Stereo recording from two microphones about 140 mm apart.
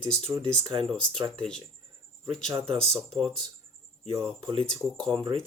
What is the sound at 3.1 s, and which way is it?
Speech, centre (ahead or behind).